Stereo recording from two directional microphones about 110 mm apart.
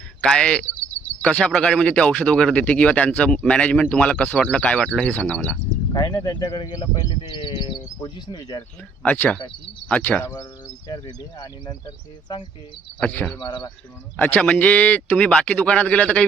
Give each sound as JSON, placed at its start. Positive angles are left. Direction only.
{"t": 0.2, "sound": "speech", "side_deg": 10}
{"t": 6.2, "sound": "speech", "side_deg": 40}
{"t": 9.0, "sound": "speech", "side_deg": 15}
{"t": 13.0, "sound": "speech", "side_deg": 15}
{"t": 13.4, "sound": "speech", "side_deg": 45}
{"t": 14.2, "sound": "speech", "side_deg": 15}